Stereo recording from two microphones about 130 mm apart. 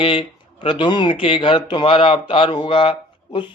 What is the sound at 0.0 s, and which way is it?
Speech, 45° left (ahead or behind).